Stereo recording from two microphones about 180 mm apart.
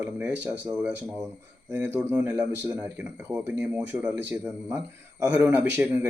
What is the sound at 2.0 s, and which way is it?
Speech, 5° right (ahead or behind).